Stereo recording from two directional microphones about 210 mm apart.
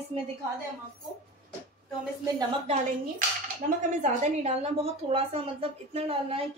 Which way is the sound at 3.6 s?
50° right (ahead or behind).